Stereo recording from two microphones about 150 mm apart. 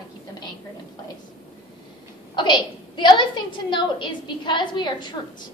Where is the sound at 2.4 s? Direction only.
30° left (ahead or behind).